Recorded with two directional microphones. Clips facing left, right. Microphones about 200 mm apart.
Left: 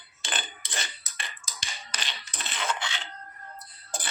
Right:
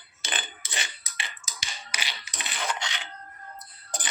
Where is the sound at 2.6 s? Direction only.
15° right (ahead or behind).